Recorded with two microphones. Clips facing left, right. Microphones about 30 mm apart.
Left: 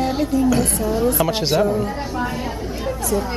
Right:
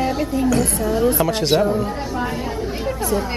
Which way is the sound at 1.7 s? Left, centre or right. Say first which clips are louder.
Even; centre.